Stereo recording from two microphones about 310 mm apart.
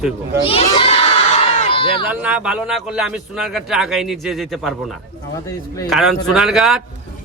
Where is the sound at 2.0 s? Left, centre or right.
Centre.